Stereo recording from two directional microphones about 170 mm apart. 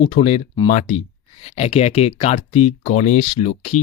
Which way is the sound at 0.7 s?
50° left (ahead or behind).